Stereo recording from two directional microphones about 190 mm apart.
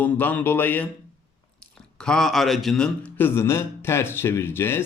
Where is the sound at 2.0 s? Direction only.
5° left (ahead or behind).